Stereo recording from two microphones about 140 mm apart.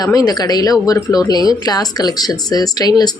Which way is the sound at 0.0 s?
25° left (ahead or behind).